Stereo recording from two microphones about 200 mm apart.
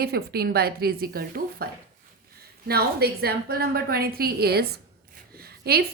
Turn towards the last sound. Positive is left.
turn(degrees=-50)  # may be behind; listen again after turning